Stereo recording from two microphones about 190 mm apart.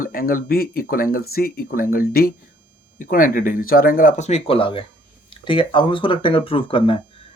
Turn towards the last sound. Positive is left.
turn(degrees=25)  # may be behind; listen again after turning